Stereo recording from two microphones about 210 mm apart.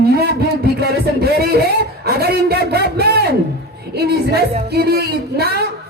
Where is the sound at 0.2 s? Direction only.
50° right (ahead or behind).